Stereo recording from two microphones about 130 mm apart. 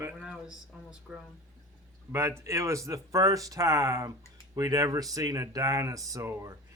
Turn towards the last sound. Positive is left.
turn(degrees=-20)  # may be behind; listen again after turning